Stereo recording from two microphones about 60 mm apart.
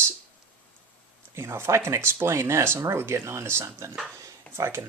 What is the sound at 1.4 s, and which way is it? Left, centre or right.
Speech, right.